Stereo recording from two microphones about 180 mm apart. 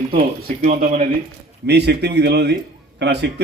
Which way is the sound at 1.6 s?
65° right (ahead or behind).